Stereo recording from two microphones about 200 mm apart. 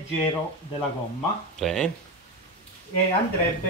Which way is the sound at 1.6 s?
5° left (ahead or behind).